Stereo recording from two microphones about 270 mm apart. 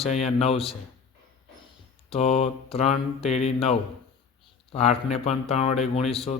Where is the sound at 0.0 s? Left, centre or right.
Left.